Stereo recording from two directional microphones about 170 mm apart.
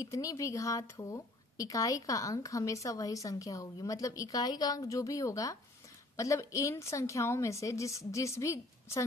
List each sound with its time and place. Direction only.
0.0 s a woman's voice: 20° left (ahead or behind)